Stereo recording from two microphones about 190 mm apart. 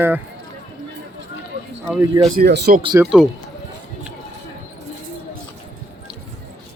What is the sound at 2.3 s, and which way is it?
Speech, 60° right (ahead or behind).